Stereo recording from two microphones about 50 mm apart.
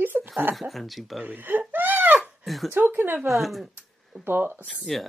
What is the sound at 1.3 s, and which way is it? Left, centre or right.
Crying, right.